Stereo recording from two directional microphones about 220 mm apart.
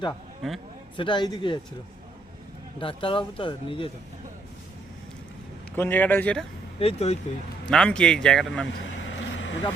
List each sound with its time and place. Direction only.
0.4 s speech: centre (ahead or behind)
0.9 s speech: 20° left (ahead or behind)
2.8 s speech: 25° left (ahead or behind)
5.7 s a man's voice: 10° left (ahead or behind)
6.7 s speech: 30° left (ahead or behind)
7.7 s speech: 5° left (ahead or behind)
8.8 s vehicle: 60° left (ahead or behind)